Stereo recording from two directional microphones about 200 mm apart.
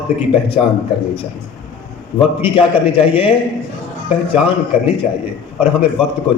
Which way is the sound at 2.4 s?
25° left (ahead or behind).